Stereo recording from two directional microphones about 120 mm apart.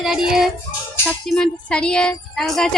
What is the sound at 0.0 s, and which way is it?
Speech, 5° right (ahead or behind).